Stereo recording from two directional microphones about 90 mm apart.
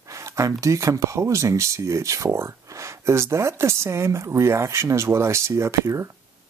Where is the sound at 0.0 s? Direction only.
35° right (ahead or behind).